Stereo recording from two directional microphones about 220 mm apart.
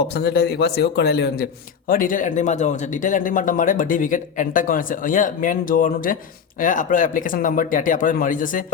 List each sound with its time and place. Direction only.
0.1 s a man's voice: 45° left (ahead or behind)